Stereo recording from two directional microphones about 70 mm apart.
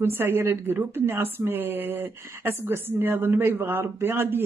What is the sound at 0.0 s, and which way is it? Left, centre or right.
Speech, right.